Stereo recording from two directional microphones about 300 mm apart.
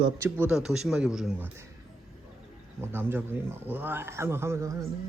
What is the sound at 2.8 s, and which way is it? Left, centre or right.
Speech, centre.